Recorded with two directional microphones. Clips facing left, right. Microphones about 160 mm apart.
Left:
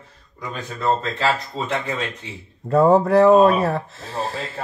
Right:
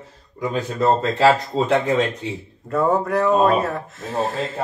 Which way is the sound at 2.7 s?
30° left (ahead or behind).